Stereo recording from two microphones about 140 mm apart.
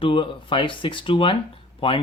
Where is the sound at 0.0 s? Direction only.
35° left (ahead or behind).